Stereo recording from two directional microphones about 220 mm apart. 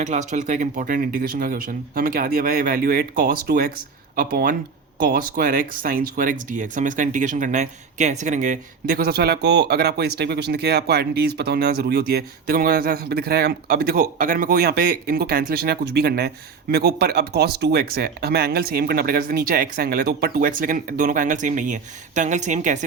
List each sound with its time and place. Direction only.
0.0 s speech: 35° right (ahead or behind)